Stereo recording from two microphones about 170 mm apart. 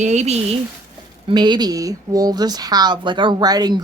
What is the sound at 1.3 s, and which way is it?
Speech, 25° right (ahead or behind).